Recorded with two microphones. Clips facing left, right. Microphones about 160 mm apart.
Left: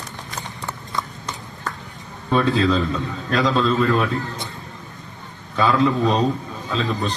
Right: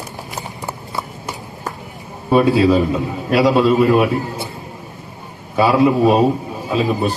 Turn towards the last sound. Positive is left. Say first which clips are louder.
# right 6 dB
turn(degrees=-15)  # may be behind; listen again after turning